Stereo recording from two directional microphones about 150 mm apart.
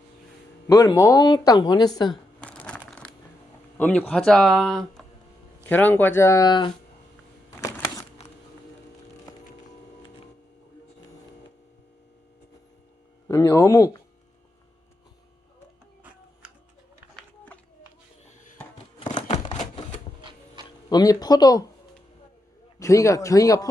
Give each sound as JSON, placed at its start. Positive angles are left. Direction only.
{"t": 0.7, "sound": "speech", "side_deg": 25}
{"t": 2.4, "sound": "crumpling", "side_deg": 10}
{"t": 3.8, "sound": "speech", "side_deg": 10}
{"t": 7.6, "sound": "a sound", "side_deg": 25}
{"t": 13.2, "sound": "speech", "side_deg": 20}
{"t": 17.2, "sound": "a sound", "side_deg": 10}
{"t": 19.5, "sound": "typewriter", "side_deg": 50}
{"t": 20.7, "sound": "speech", "side_deg": 25}
{"t": 22.8, "sound": "speech", "side_deg": 20}